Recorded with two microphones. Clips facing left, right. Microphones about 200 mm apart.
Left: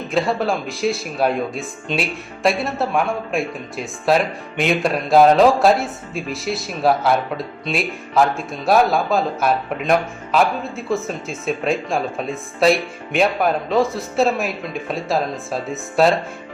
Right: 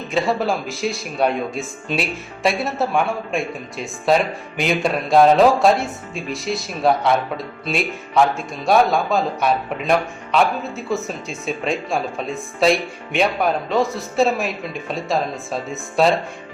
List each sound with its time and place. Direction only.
0.1 s speech: centre (ahead or behind)